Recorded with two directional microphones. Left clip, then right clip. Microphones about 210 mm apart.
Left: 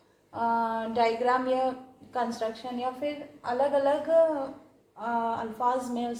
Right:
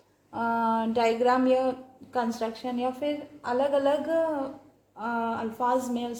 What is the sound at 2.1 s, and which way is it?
A woman's voice, 45° right (ahead or behind).